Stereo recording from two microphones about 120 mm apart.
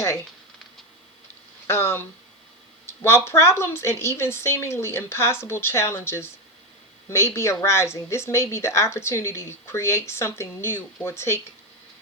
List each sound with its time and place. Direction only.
1.6 s speech: 20° left (ahead or behind)
2.8 s a sound: 20° left (ahead or behind)
3.2 s speech: 20° left (ahead or behind)